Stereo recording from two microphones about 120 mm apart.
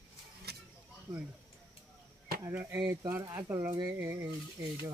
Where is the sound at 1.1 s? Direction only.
10° right (ahead or behind).